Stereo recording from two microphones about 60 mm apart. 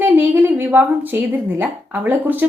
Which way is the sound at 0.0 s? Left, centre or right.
Right.